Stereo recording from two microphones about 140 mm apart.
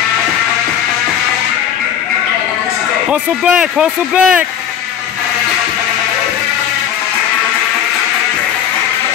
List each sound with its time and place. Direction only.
3.1 s speech: 5° right (ahead or behind)